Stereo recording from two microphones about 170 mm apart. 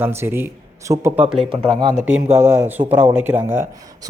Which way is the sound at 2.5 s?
10° right (ahead or behind).